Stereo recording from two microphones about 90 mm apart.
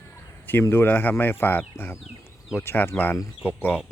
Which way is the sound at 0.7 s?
25° left (ahead or behind).